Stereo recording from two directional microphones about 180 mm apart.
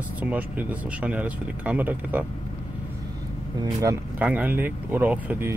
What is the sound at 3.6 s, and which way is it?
Speech, 20° right (ahead or behind).